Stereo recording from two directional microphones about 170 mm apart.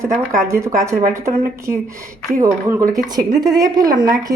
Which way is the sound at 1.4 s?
55° right (ahead or behind).